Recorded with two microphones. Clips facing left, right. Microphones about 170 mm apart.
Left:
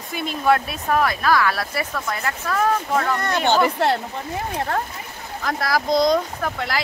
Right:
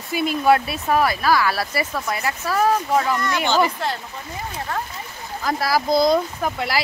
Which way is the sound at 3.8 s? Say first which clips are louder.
Left 6 dB; 65° left (ahead or behind).